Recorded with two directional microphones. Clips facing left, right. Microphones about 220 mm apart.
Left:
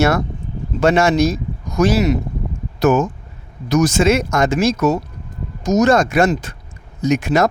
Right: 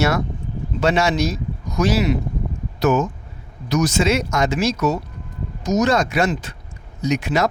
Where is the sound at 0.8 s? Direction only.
50° left (ahead or behind).